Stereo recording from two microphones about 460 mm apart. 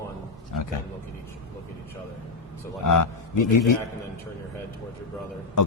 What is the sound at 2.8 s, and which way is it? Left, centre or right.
Speech, left.